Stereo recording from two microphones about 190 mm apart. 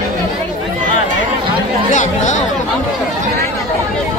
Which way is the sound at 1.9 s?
40° left (ahead or behind).